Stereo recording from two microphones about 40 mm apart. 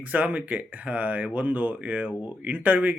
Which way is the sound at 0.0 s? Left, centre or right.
Right.